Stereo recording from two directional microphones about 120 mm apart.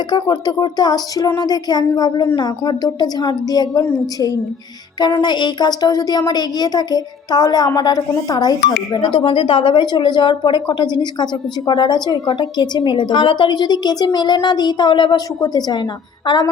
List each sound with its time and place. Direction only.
0.1 s speech: 35° left (ahead or behind)
9.1 s speech: 50° left (ahead or behind)